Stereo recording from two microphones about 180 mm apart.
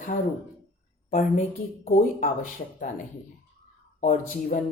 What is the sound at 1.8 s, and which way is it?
Speech, 45° left (ahead or behind).